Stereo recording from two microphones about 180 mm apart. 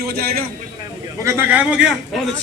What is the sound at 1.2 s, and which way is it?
Speech, 10° right (ahead or behind).